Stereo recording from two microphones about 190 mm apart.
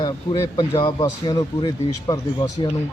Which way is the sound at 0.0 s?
25° left (ahead or behind).